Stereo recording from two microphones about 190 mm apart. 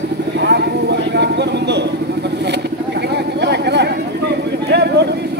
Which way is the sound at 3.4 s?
60° right (ahead or behind).